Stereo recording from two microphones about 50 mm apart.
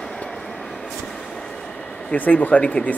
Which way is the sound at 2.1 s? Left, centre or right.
Left.